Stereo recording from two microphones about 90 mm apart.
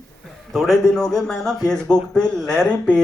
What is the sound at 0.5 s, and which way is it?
A man's voice, centre (ahead or behind).